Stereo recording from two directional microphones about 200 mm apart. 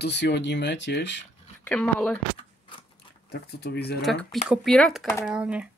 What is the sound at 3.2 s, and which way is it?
Speech, 55° left (ahead or behind).